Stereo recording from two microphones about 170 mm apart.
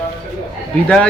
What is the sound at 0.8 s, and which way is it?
Speech, 5° left (ahead or behind).